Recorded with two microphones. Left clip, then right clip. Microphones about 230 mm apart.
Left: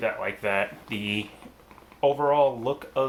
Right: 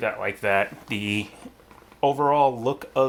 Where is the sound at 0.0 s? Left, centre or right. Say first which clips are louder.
Right 2 dB; right.